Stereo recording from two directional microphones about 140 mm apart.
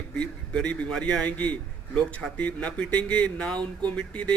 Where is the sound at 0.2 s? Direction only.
10° left (ahead or behind).